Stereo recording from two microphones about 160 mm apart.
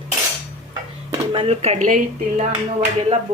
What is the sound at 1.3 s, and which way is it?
Speech, 40° right (ahead or behind).